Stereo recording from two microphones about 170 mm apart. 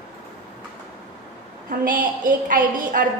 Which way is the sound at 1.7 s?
50° right (ahead or behind).